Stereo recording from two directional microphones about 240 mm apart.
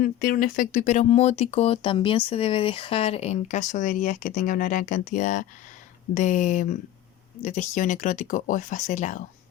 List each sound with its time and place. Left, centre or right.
0.0 s speech: left